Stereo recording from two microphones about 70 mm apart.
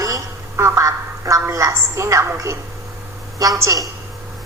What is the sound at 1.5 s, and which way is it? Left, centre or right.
Speech, right.